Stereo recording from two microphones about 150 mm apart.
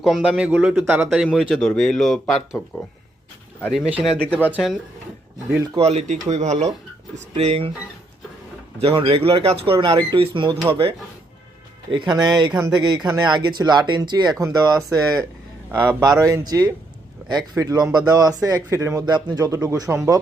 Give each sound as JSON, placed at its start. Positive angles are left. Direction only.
{"t": 0.0, "sound": "a man's voice", "side_deg": 0}
{"t": 5.8, "sound": "speech", "side_deg": -45}
{"t": 8.8, "sound": "speech", "side_deg": -35}